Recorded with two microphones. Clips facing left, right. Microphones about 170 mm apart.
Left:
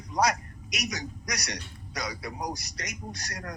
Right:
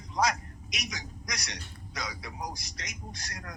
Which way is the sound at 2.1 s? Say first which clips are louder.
Left 5 dB; 60° left (ahead or behind).